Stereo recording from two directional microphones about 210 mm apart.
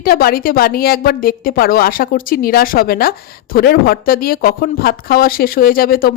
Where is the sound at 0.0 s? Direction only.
45° left (ahead or behind).